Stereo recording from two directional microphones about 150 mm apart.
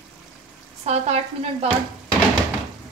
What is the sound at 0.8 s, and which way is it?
Speech, 45° right (ahead or behind).